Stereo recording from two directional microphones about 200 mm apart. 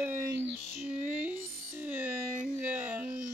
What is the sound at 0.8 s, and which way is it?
Music, 10° right (ahead or behind).